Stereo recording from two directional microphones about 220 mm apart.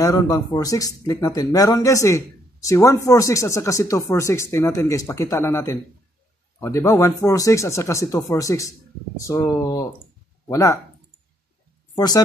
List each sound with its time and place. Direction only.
0.0 s speech: 15° left (ahead or behind)
11.9 s speech: 20° left (ahead or behind)